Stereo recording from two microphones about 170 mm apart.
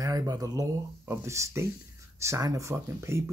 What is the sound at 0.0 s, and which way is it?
Speech, 20° right (ahead or behind).